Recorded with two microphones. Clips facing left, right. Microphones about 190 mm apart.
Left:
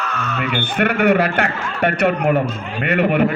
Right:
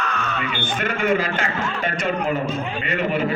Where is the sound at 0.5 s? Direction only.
65° left (ahead or behind).